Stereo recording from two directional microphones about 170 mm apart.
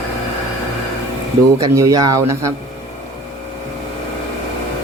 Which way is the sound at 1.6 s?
20° right (ahead or behind).